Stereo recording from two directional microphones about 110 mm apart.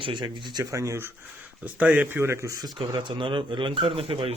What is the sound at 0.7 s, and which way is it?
Speech, 30° right (ahead or behind).